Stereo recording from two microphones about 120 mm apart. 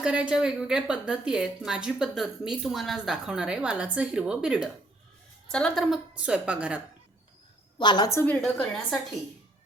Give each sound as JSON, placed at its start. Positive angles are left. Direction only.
{"t": 0.0, "sound": "a woman's voice", "side_deg": -10}
{"t": 5.5, "sound": "a woman's voice", "side_deg": 5}
{"t": 7.8, "sound": "a woman's voice", "side_deg": 40}
{"t": 8.1, "sound": "a woman's voice", "side_deg": 15}
{"t": 8.4, "sound": "a woman's voice", "side_deg": 5}